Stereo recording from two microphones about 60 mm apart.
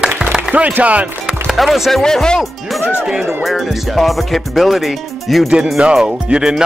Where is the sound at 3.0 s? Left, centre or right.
Centre.